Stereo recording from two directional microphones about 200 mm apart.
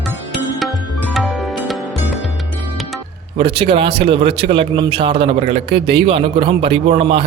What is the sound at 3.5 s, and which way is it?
A man's voice, 25° right (ahead or behind).